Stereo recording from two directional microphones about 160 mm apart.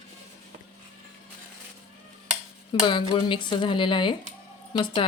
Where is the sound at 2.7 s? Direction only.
30° left (ahead or behind).